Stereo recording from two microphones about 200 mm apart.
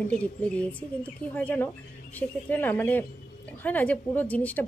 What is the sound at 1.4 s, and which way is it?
Speech, 10° left (ahead or behind).